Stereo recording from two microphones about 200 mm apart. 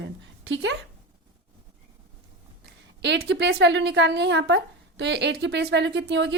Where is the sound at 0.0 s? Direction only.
65° right (ahead or behind).